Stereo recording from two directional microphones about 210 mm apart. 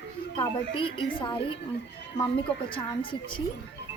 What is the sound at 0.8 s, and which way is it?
Speech, 25° left (ahead or behind).